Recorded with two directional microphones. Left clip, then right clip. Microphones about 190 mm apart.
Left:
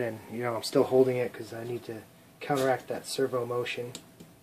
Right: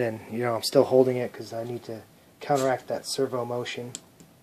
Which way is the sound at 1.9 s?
30° right (ahead or behind).